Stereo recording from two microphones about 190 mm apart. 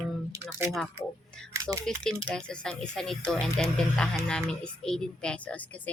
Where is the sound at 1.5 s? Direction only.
15° right (ahead or behind).